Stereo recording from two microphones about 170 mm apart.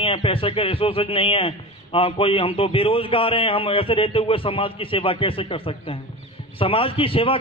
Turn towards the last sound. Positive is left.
turn(degrees=30)  # may be behind; listen again after turning